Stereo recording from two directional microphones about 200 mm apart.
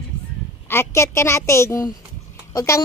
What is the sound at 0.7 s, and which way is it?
A woman's voice, 15° left (ahead or behind).